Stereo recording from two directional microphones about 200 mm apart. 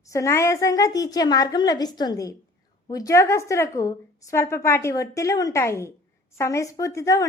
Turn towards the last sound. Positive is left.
turn(degrees=15)  # may be behind; listen again after turning